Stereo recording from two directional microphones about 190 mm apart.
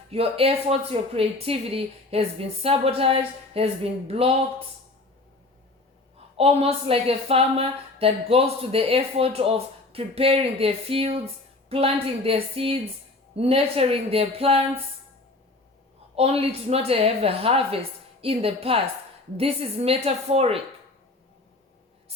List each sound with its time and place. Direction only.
0.1 s a woman's voice: 30° right (ahead or behind)
6.3 s a woman's voice: 30° right (ahead or behind)
16.1 s a woman's voice: 30° right (ahead or behind)